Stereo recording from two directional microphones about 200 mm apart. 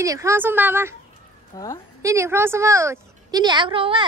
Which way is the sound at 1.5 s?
15° left (ahead or behind).